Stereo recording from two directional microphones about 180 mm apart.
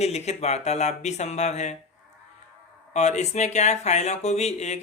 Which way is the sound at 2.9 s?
40° left (ahead or behind).